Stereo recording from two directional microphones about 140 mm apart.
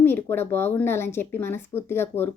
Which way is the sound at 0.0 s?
15° left (ahead or behind).